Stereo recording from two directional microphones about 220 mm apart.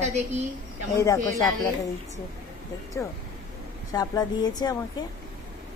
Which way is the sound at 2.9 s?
10° left (ahead or behind).